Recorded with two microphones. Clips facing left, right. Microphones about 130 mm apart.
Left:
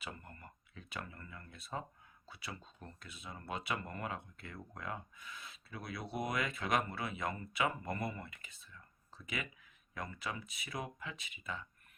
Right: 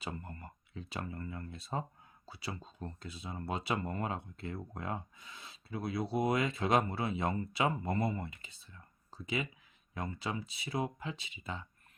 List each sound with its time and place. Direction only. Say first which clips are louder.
0.0 s speech: right 6 dB; 30° right (ahead or behind)